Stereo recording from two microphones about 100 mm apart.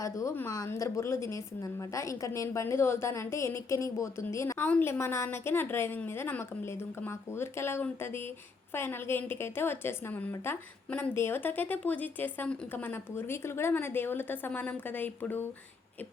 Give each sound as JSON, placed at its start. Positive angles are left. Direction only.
{"t": 0.0, "sound": "a woman's voice", "side_deg": 30}